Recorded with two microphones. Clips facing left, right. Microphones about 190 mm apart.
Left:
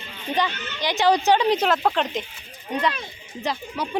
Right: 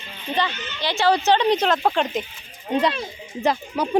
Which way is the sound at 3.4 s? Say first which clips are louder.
Right 5 dB; 50° right (ahead or behind).